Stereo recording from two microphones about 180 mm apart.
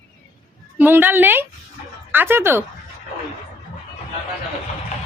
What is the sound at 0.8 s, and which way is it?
Speech, 10° right (ahead or behind).